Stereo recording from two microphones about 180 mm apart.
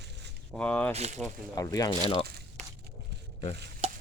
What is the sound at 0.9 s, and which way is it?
Speech, 35° right (ahead or behind).